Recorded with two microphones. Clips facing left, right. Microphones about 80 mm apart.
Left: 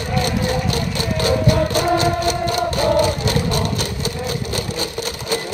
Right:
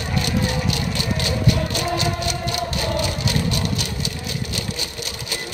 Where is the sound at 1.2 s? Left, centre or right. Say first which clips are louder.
Left 7 dB; left.